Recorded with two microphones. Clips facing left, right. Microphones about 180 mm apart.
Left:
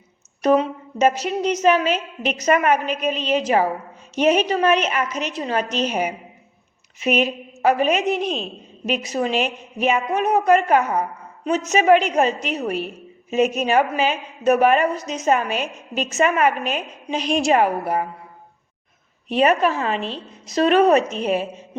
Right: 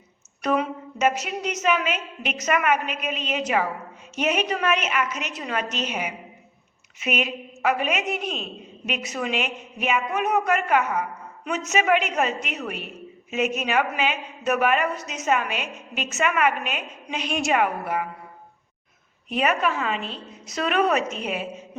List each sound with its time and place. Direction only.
0.4 s a woman's voice: 30° left (ahead or behind)
19.3 s a woman's voice: 30° left (ahead or behind)